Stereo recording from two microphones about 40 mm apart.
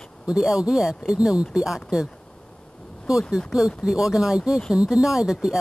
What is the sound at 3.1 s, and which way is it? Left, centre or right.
Speech, centre.